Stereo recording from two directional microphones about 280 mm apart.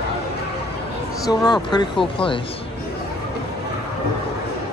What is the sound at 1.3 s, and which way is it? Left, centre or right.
Speech, centre.